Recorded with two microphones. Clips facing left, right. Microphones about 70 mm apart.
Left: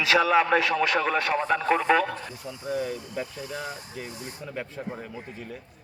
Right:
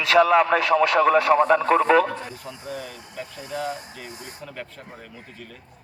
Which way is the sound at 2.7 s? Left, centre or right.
Left.